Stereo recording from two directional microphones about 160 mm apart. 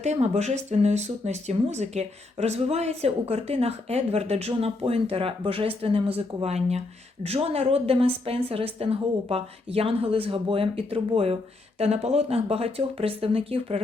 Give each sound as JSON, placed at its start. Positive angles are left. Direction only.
{"t": 0.0, "sound": "speech", "side_deg": -45}